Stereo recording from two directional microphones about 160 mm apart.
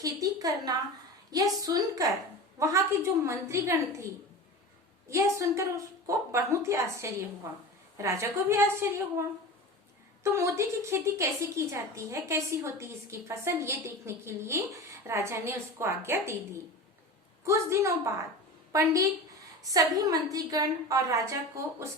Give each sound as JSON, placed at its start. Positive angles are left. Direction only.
{"t": 0.0, "sound": "a woman's voice", "side_deg": -20}
{"t": 5.0, "sound": "a woman's voice", "side_deg": -20}
{"t": 10.2, "sound": "a woman's voice", "side_deg": -15}